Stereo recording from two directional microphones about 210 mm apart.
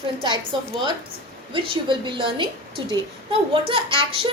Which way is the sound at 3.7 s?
25° right (ahead or behind).